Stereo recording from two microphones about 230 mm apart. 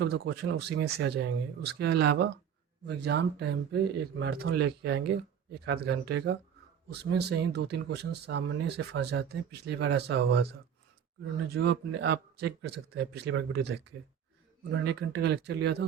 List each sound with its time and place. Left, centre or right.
0.0 s speech: right
11.5 s speech: right